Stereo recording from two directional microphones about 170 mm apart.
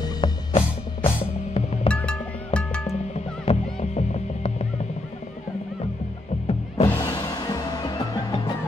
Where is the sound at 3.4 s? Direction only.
40° left (ahead or behind).